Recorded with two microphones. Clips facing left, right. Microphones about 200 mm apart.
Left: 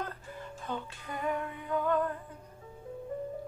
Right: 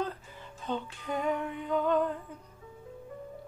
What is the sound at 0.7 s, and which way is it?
Music, 20° right (ahead or behind).